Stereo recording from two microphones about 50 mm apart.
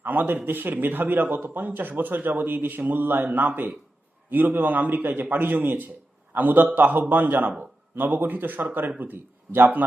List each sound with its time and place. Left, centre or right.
0.0 s a man's voice: right